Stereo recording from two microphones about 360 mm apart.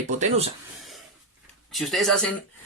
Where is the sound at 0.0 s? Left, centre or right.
Centre.